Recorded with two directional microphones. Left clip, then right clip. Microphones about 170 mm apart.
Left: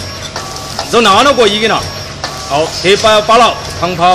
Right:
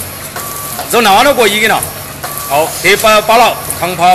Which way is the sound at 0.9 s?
25° left (ahead or behind).